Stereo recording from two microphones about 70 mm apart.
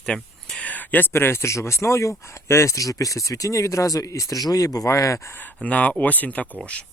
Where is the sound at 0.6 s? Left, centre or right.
Left.